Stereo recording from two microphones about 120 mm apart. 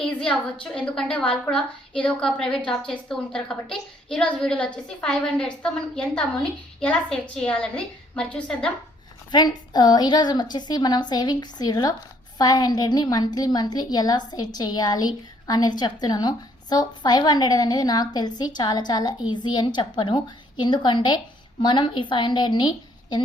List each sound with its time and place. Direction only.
0.0 s a sound: 5° left (ahead or behind)
0.6 s a woman's voice: 10° left (ahead or behind)
9.3 s a woman's voice: 35° left (ahead or behind)